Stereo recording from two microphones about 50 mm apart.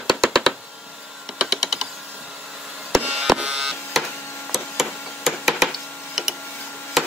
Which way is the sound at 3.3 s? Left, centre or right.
Centre.